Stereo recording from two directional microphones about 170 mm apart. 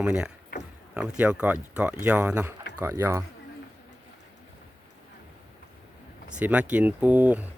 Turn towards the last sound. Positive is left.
turn(degrees=-10)  # may be behind; listen again after turning